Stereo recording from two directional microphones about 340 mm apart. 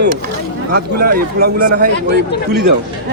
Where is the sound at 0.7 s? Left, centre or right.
Right.